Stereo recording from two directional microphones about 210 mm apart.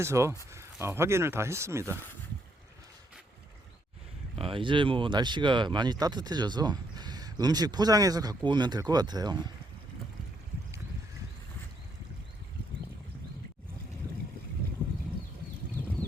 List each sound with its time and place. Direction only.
0.0 s speech: 15° right (ahead or behind)
4.4 s speech: 25° right (ahead or behind)